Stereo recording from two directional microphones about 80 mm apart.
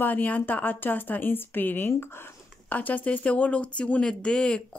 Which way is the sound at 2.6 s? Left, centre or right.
Left.